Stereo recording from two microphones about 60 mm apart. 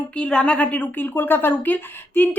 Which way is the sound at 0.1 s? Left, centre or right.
Centre.